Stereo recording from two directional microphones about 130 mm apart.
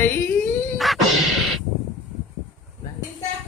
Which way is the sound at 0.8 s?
Centre (ahead or behind).